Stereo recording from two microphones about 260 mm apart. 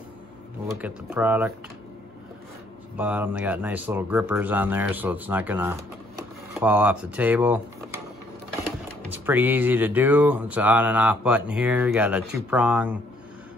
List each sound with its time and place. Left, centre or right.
0.7 s speech: centre
3.0 s speech: centre
9.1 s speech: centre